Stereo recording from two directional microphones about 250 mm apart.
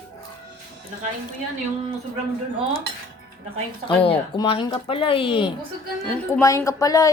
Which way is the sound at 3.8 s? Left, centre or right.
Left.